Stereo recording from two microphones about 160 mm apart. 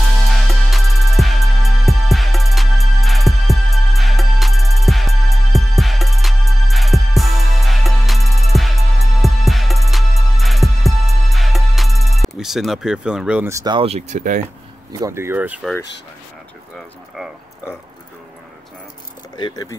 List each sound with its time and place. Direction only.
0.3 s music: centre (ahead or behind)
13.5 s speech: 20° right (ahead or behind)
13.7 s speech: 40° right (ahead or behind)
14.9 s speech: 20° right (ahead or behind)
19.3 s speech: 25° left (ahead or behind)